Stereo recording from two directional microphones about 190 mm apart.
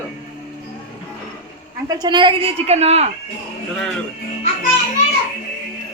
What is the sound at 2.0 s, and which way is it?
A woman's voice, 25° right (ahead or behind).